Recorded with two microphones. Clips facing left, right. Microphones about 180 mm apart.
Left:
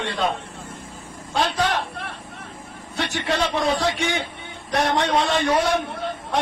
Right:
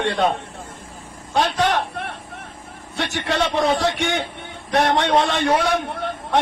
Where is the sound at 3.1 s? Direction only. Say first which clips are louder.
Right 2 dB; 60° right (ahead or behind).